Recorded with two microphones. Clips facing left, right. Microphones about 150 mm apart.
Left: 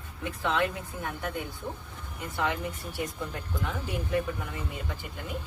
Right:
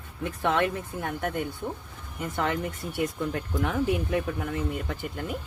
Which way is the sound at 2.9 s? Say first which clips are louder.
Right 9 dB; 65° right (ahead or behind).